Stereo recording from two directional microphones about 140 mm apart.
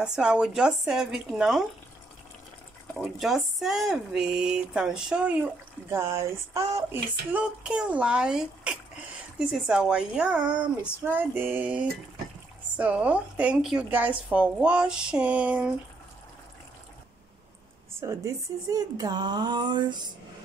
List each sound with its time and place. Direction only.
0.0 s speech: 5° right (ahead or behind)
3.2 s speech: centre (ahead or behind); by 7.0 s 20° right (ahead or behind)
7.3 s speech: 10° right (ahead or behind)
18.0 s a woman's voice: 20° right (ahead or behind)